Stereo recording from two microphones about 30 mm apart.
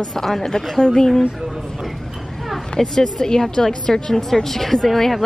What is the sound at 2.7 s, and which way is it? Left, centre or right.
A woman's voice, centre.